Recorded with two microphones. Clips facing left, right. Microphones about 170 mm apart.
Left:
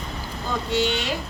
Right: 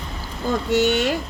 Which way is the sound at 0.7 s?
50° right (ahead or behind).